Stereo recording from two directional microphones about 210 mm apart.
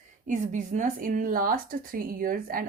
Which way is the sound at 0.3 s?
35° right (ahead or behind).